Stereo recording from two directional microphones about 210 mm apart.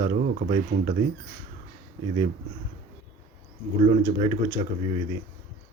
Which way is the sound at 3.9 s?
30° right (ahead or behind).